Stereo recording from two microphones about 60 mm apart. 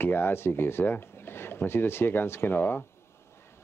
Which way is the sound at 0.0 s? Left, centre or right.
Left.